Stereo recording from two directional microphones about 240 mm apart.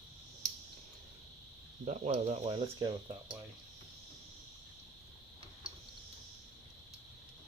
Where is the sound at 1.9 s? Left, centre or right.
Right.